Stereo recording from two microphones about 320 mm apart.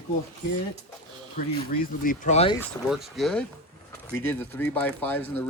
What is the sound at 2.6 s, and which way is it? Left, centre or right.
Speech, centre.